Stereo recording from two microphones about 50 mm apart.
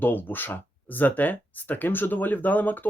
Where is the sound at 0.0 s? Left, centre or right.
Left.